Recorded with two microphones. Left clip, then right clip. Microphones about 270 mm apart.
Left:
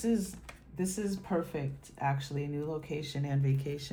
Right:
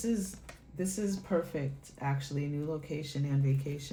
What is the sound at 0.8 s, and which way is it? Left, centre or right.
Speech, left.